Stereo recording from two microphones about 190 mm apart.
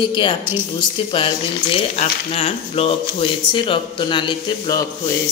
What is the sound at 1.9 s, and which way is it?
Speech, 30° left (ahead or behind).